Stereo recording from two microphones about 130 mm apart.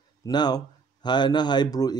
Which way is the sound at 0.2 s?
30° left (ahead or behind).